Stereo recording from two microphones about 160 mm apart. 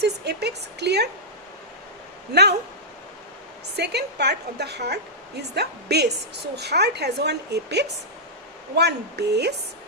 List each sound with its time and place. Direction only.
0.0 s a woman's voice: 90° right
2.3 s a woman's voice: 90° right
3.8 s a woman's voice: 90° right